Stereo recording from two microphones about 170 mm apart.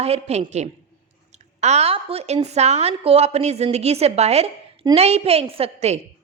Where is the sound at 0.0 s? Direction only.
40° right (ahead or behind).